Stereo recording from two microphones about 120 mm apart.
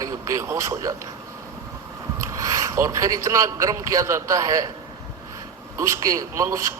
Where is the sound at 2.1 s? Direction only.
25° right (ahead or behind).